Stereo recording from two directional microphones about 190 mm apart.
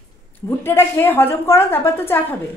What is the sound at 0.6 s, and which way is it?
A woman's voice, 10° left (ahead or behind).